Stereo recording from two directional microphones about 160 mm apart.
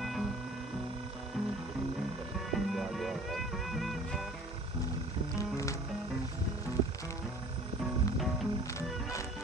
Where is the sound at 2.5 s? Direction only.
Centre (ahead or behind).